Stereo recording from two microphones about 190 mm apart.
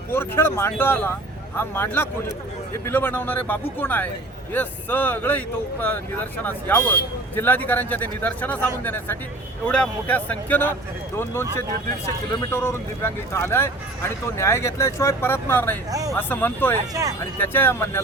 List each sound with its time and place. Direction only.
0.1 s a man's voice: 10° left (ahead or behind)
12.5 s a man's voice: 15° left (ahead or behind)
15.9 s speech: 20° right (ahead or behind)
16.1 s a man's voice: 10° left (ahead or behind)
16.9 s speech: 20° right (ahead or behind)
17.3 s a man's voice: 10° left (ahead or behind)